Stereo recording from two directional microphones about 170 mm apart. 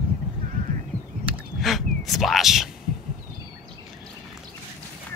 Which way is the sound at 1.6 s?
Centre (ahead or behind).